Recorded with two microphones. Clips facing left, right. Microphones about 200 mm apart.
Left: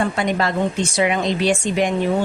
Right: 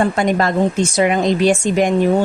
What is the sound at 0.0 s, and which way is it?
A woman's voice, 45° right (ahead or behind).